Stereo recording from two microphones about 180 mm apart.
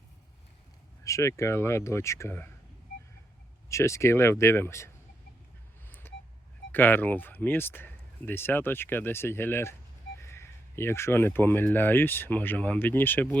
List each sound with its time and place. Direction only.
1.0 s speech: 15° left (ahead or behind)
3.7 s speech: 15° left (ahead or behind)
5.9 s a sound: 10° left (ahead or behind)
6.7 s speech: 10° left (ahead or behind)